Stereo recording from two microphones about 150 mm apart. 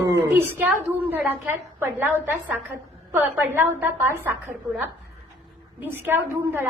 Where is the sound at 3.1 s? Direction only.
15° right (ahead or behind).